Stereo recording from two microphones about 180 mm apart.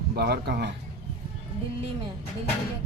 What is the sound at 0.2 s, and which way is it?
Speech, 65° right (ahead or behind).